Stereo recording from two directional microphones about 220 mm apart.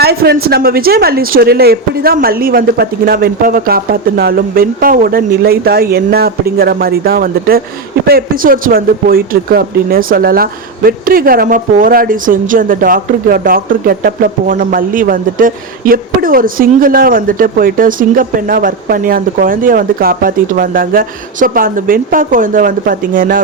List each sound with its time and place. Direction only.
0.0 s speech: 45° right (ahead or behind)